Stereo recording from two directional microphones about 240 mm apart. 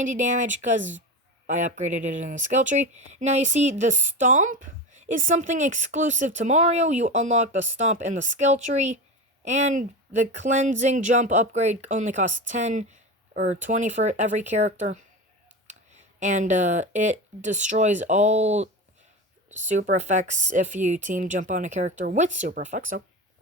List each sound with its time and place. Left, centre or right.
0.0 s a woman's voice: right